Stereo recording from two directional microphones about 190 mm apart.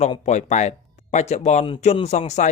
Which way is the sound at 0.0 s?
35° left (ahead or behind).